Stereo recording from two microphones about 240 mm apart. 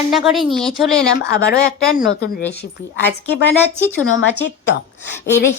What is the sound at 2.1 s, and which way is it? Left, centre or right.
Speech, left.